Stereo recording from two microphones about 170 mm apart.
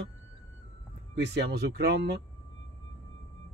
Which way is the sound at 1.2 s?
75° right (ahead or behind).